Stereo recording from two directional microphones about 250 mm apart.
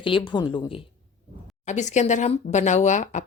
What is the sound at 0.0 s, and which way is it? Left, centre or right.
Speech, centre.